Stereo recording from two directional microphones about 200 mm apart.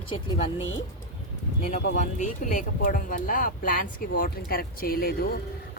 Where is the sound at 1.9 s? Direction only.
40° left (ahead or behind).